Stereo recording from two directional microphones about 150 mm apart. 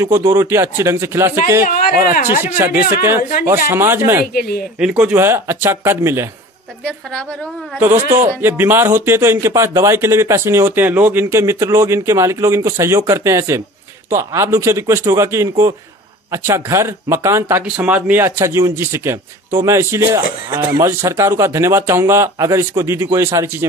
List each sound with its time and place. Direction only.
0.0 s speech: 20° right (ahead or behind)
2.6 s speech: 15° right (ahead or behind)
3.2 s speech: 70° left (ahead or behind)
3.4 s speech: 15° right (ahead or behind)
4.3 s speech: 90° left
4.7 s speech: 5° right (ahead or behind)
6.8 s a woman's voice: 5° left (ahead or behind)
8.2 s speech: 15° right (ahead or behind)